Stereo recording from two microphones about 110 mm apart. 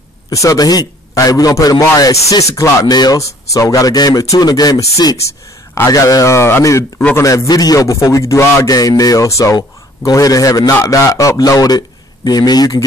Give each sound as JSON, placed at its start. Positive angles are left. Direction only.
{"t": 0.3, "sound": "a man's voice", "side_deg": 30}